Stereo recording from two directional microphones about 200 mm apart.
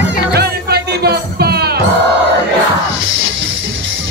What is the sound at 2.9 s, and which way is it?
Music, 70° right (ahead or behind).